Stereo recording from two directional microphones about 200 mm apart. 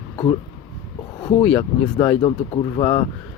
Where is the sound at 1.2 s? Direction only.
25° left (ahead or behind).